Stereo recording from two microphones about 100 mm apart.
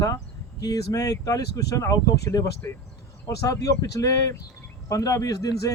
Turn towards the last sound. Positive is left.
turn(degrees=35)  # may be behind; listen again after turning